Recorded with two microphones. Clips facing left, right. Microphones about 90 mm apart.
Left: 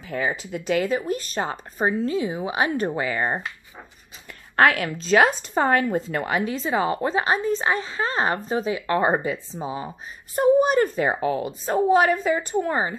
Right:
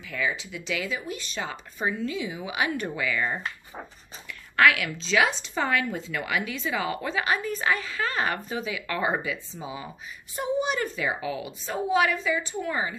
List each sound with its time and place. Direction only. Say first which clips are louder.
0.0 s a woman's voice: left 4 dB; 40° left (ahead or behind)